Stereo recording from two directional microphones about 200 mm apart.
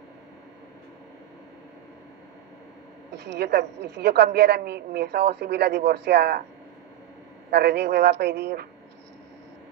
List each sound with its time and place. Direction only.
3.2 s a woman's voice: 55° right (ahead or behind)
7.5 s a woman's voice: 55° right (ahead or behind)